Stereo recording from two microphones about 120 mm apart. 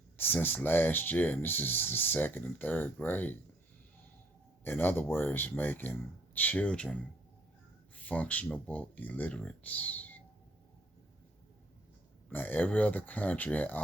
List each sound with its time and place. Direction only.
0.2 s speech: 15° left (ahead or behind)
4.6 s speech: 15° left (ahead or behind)
7.9 s speech: 10° left (ahead or behind)
12.3 s speech: 15° left (ahead or behind)